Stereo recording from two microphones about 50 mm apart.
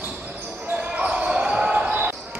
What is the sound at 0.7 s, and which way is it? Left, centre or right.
Basketball bounce, right.